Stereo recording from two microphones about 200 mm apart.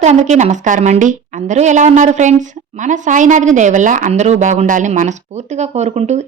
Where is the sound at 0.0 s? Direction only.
35° right (ahead or behind).